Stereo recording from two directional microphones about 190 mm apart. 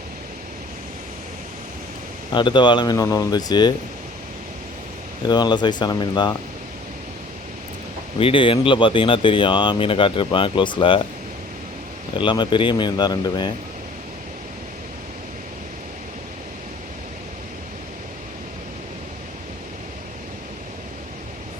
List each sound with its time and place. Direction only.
2.3 s speech: 25° left (ahead or behind)
5.3 s speech: 20° left (ahead or behind)
8.2 s speech: 30° left (ahead or behind)
12.1 s speech: 25° left (ahead or behind)